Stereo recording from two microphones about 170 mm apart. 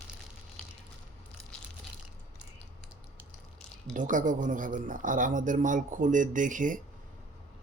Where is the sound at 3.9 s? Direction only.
50° right (ahead or behind).